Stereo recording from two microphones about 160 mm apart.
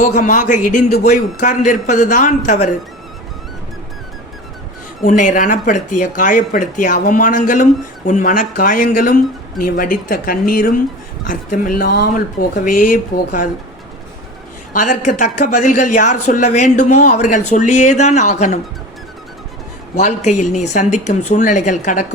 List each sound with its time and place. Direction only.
0.0 s a man's voice: 50° left (ahead or behind)
5.0 s speech: 55° left (ahead or behind)
14.7 s a man's voice: 50° left (ahead or behind)
20.0 s a man's voice: 45° left (ahead or behind)